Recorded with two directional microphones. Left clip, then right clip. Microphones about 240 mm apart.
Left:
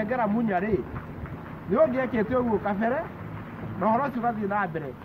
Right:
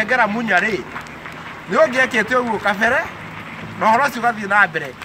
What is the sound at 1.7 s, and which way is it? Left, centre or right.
A man's voice, centre.